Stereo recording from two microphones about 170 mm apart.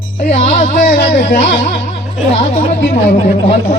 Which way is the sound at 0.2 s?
45° left (ahead or behind).